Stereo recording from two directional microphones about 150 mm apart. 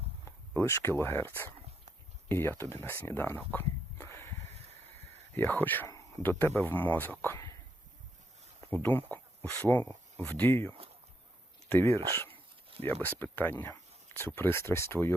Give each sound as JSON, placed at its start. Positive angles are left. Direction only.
{"t": 0.3, "sound": "speech", "side_deg": 15}
{"t": 8.7, "sound": "speech", "side_deg": 15}